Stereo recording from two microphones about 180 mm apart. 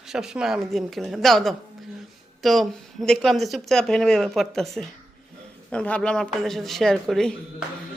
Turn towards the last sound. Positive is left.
turn(degrees=0)  # may be behind; listen again after turning